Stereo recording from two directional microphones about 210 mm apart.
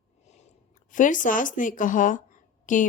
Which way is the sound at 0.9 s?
40° left (ahead or behind).